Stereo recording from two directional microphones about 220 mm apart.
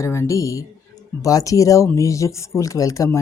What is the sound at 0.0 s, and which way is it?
Speech, 15° left (ahead or behind).